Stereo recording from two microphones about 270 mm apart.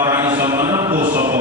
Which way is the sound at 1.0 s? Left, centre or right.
Right.